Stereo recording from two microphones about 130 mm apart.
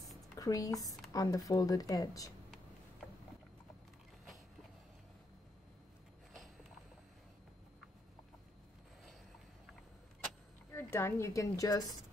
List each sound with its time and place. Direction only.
0.4 s speech: 25° left (ahead or behind)
10.7 s a woman's voice: 20° left (ahead or behind)